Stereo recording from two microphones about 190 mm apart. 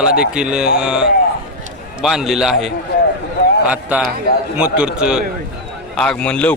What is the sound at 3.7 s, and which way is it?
A man's voice, 5° right (ahead or behind).